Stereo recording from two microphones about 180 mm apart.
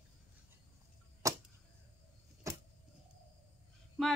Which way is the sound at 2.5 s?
15° right (ahead or behind).